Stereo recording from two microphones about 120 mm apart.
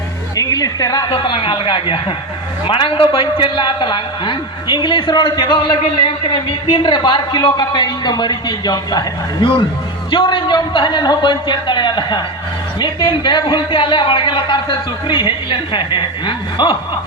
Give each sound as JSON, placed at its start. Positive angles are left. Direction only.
{"t": 0.3, "sound": "speech", "side_deg": 30}
{"t": 1.1, "sound": "a man's voice", "side_deg": 45}